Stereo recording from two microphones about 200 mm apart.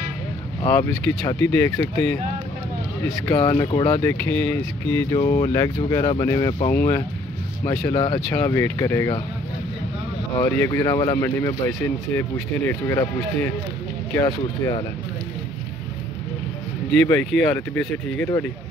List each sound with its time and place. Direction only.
0.7 s speech: 15° left (ahead or behind)
3.3 s speech: 20° left (ahead or behind)
7.9 s speech: 20° left (ahead or behind)
8.4 s speech: 10° left (ahead or behind)
10.4 s speech: 15° left (ahead or behind)
16.9 s speech: 5° left (ahead or behind)